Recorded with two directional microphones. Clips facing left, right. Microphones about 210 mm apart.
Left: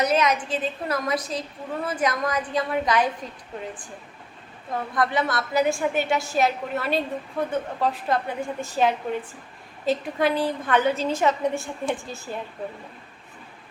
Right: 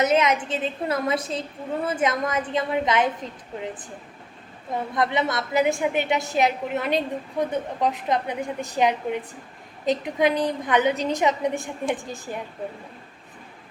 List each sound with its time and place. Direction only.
0.0 s a woman's voice: 25° right (ahead or behind)
4.7 s a woman's voice: 20° right (ahead or behind)